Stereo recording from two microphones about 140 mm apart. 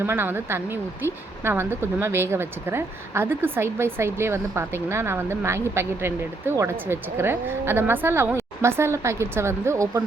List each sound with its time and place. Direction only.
0.0 s speech: 15° right (ahead or behind)